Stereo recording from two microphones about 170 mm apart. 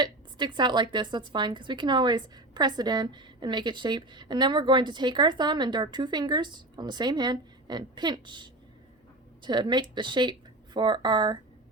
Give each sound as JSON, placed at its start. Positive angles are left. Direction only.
{"t": 0.0, "sound": "speech", "side_deg": -25}